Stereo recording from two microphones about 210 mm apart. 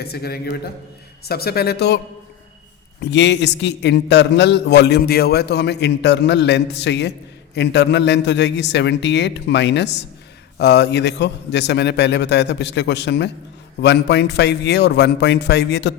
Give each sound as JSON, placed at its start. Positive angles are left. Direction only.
{"t": 0.0, "sound": "a man's voice", "side_deg": 50}
{"t": 3.0, "sound": "a man's voice", "side_deg": 55}